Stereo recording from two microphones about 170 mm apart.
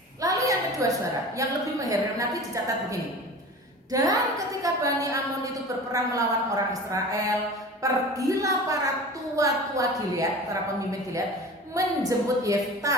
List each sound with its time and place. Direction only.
0.2 s a sound: 20° right (ahead or behind)
1.4 s a woman's voice: 20° right (ahead or behind)
3.9 s a woman's voice: 20° right (ahead or behind)
11.7 s a woman's voice: 20° right (ahead or behind)